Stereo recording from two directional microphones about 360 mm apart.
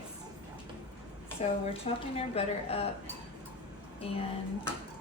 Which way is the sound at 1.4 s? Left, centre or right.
Centre.